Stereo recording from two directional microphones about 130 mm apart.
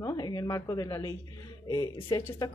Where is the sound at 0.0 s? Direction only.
30° left (ahead or behind).